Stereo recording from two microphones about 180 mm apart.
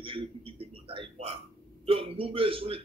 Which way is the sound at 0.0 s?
30° right (ahead or behind).